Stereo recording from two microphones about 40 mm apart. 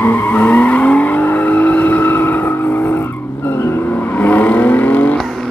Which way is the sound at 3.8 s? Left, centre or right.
Left.